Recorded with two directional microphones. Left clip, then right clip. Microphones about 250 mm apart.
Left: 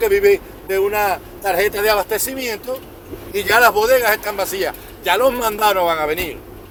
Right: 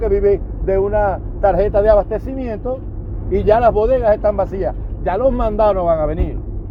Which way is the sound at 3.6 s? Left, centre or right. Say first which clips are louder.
Left 1 dB; left.